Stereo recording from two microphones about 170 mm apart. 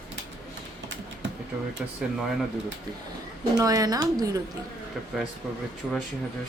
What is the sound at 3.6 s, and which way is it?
Speech, 20° right (ahead or behind).